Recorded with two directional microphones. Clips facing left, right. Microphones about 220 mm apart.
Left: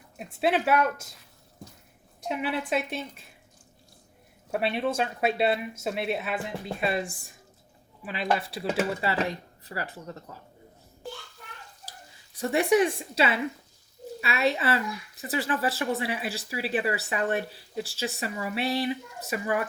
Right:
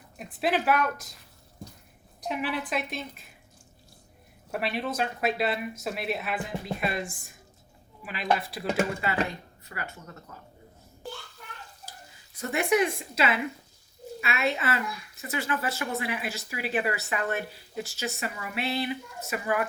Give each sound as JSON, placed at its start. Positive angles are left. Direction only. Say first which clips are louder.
{"t": 0.3, "sound": "speech", "louder": "left 1 dB", "side_deg": 25}
{"t": 2.2, "sound": "speech", "louder": "left 1 dB", "side_deg": 25}
{"t": 4.6, "sound": "speech", "louder": "left 2 dB", "side_deg": 30}
{"t": 8.0, "sound": "speech", "louder": "even", "side_deg": 30}
{"t": 12.4, "sound": "speech", "louder": "left 3 dB", "side_deg": 30}